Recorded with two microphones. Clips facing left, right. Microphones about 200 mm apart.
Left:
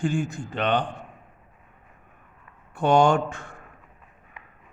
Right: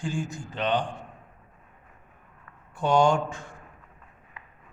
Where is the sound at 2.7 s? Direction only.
60° left (ahead or behind).